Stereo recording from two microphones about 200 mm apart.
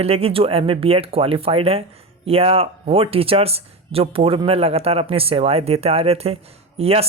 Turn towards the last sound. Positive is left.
turn(degrees=-30)  # may be behind; listen again after turning